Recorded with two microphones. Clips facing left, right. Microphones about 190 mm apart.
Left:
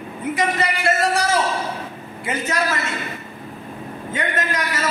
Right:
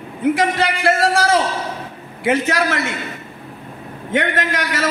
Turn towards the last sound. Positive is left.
turn(degrees=-80)